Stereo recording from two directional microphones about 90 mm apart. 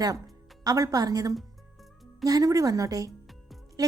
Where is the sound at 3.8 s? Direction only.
40° right (ahead or behind).